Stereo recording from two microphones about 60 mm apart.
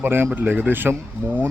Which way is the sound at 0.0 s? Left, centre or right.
Right.